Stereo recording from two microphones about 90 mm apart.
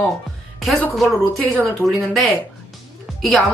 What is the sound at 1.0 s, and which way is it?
Speech, centre (ahead or behind).